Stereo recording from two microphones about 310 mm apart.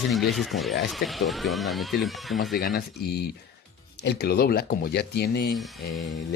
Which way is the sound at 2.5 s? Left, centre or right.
Left.